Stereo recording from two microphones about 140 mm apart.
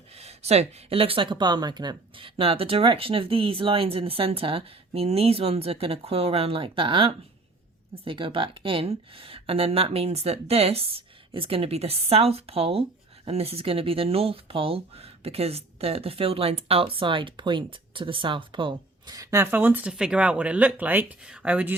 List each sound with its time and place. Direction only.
0.1 s speech: 50° right (ahead or behind); by 21.8 s 10° right (ahead or behind)